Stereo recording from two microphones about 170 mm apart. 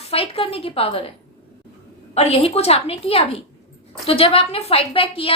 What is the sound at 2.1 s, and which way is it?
A woman's voice, 35° left (ahead or behind).